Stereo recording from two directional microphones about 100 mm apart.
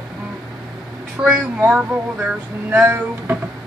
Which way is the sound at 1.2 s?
10° right (ahead or behind).